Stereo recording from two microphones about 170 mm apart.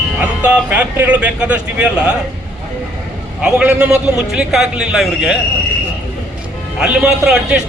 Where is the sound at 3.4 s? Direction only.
5° right (ahead or behind).